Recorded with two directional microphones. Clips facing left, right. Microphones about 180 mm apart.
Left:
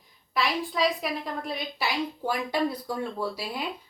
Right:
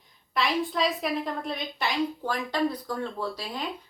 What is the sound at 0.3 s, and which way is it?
A woman's voice, centre (ahead or behind).